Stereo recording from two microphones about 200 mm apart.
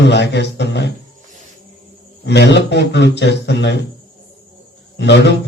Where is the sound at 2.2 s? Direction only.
60° left (ahead or behind).